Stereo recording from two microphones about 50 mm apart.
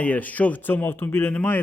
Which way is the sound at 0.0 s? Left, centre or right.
Left.